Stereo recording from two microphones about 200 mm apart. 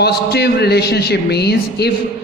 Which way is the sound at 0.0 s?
55° left (ahead or behind).